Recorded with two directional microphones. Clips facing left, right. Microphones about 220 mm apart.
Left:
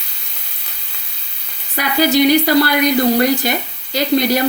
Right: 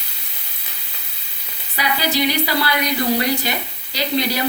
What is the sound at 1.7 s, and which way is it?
Speech, 50° left (ahead or behind).